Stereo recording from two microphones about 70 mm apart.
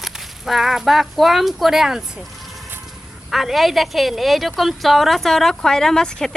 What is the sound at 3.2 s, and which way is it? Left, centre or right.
A woman's voice, centre.